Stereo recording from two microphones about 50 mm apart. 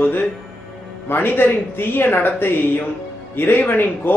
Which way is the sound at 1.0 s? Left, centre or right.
Left.